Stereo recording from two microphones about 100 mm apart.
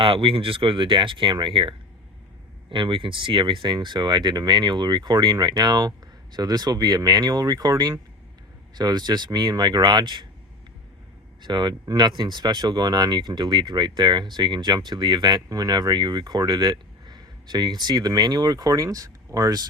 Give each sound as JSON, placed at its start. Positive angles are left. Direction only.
{"t": 0.0, "sound": "speech", "side_deg": -60}
{"t": 11.4, "sound": "speech", "side_deg": -45}